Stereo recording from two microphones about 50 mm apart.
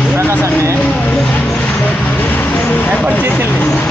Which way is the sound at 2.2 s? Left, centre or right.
Left.